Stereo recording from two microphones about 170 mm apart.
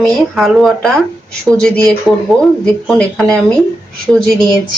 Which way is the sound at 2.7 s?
5° left (ahead or behind).